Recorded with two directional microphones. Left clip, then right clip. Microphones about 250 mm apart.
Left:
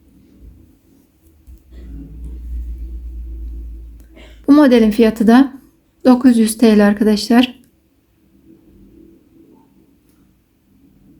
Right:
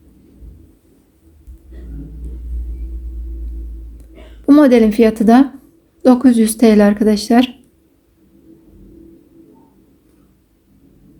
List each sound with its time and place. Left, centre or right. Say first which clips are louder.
4.4 s speech: right 1 dB; centre